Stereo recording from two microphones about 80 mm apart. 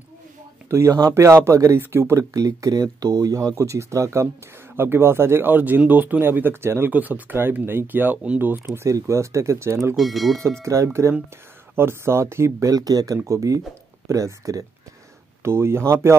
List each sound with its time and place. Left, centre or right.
0.7 s speech: right
4.7 s speech: right
6.9 s speech: right
8.6 s speech: right
9.9 s speech: centre
10.6 s speech: right
12.7 s speech: right
15.4 s speech: right